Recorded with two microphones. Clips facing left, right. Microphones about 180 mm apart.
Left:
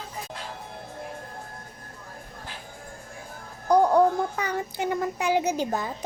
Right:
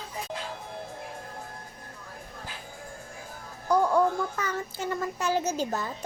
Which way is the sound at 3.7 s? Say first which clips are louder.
Left 4 dB; 35° left (ahead or behind).